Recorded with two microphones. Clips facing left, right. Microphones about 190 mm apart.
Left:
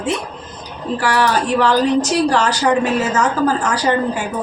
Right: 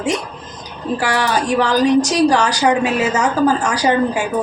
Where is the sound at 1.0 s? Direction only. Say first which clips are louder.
Left 2 dB; 15° right (ahead or behind).